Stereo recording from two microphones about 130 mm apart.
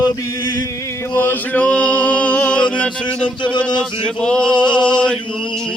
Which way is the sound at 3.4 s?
40° left (ahead or behind).